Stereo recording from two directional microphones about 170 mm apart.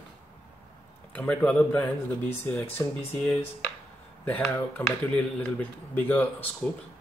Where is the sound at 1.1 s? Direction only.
10° left (ahead or behind).